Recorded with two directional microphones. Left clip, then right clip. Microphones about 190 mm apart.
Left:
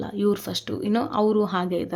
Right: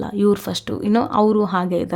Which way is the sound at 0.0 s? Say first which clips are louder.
Right 6 dB; 30° right (ahead or behind).